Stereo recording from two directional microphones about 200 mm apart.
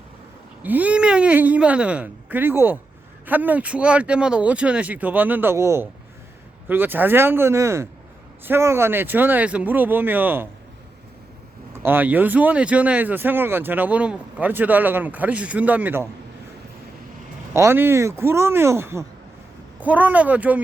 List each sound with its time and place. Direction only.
0.6 s speech: 10° right (ahead or behind)
11.7 s speech: 10° right (ahead or behind)
17.5 s speech: 15° right (ahead or behind)